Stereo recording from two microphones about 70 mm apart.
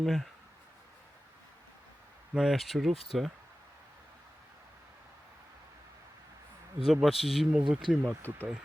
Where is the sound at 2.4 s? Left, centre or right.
Centre.